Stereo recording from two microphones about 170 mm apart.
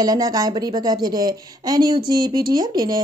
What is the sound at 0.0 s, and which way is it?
A woman's voice, 20° right (ahead or behind).